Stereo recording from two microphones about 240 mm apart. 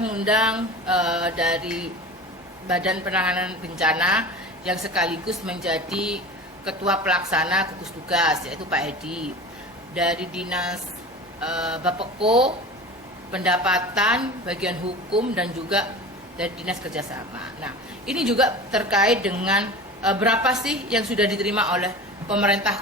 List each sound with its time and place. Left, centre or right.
0.0 s a woman's voice: centre
11.9 s speech: right
13.3 s a woman's voice: centre